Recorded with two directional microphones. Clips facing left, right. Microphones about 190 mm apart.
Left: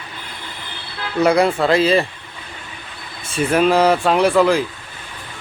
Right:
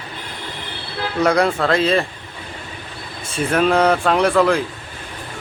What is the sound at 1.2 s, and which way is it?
Speech, 5° left (ahead or behind).